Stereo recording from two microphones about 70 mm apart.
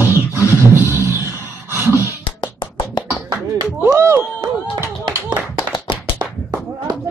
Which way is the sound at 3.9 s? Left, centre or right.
Right.